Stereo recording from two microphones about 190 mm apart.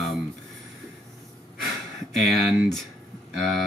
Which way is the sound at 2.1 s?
Centre (ahead or behind).